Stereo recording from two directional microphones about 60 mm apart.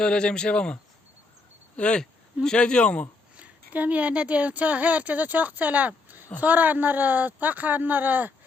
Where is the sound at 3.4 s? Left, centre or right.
Right.